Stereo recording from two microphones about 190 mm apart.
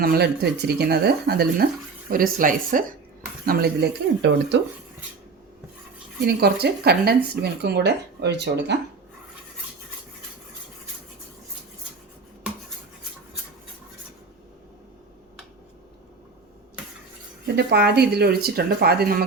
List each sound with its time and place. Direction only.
0.0 s speech: 55° right (ahead or behind)
6.2 s speech: 55° right (ahead or behind)
17.4 s speech: 60° right (ahead or behind)